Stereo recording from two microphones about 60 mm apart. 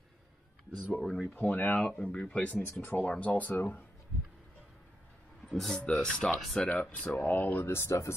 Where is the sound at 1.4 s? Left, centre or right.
Left.